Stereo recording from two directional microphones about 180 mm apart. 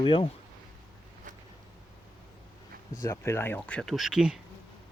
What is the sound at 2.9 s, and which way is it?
Speech, 15° left (ahead or behind).